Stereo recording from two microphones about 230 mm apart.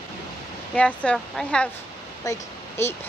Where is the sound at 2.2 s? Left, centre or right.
Centre.